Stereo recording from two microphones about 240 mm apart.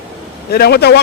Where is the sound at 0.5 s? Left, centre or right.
Left.